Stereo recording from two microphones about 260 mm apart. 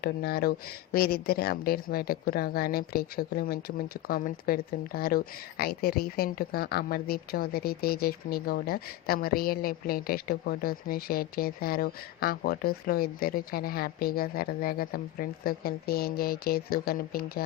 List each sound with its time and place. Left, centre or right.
0.0 s speech: left